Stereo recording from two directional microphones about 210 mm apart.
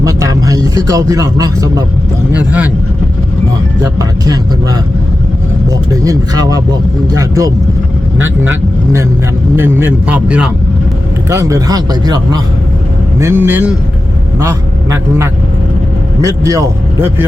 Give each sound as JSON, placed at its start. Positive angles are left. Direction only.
{"t": 0.0, "sound": "music", "side_deg": -15}
{"t": 3.9, "sound": "speech", "side_deg": -20}
{"t": 5.9, "sound": "speech", "side_deg": -15}
{"t": 9.6, "sound": "a man's voice", "side_deg": -10}